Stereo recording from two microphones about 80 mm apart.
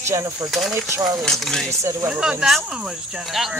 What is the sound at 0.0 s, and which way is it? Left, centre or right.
Speech, right.